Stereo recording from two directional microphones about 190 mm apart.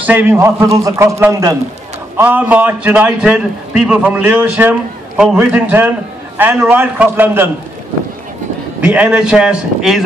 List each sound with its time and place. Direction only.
0.0 s a man's voice: 10° right (ahead or behind)
8.8 s a man's voice: 5° right (ahead or behind)